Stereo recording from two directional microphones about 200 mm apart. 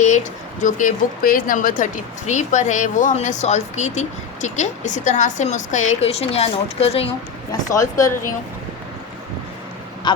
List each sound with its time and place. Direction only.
0.6 s speech: 40° left (ahead or behind)
7.7 s speech: 15° left (ahead or behind)